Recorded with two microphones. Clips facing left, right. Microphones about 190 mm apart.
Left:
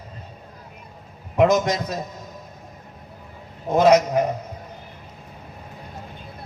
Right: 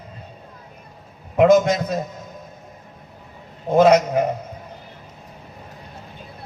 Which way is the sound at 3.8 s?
55° right (ahead or behind).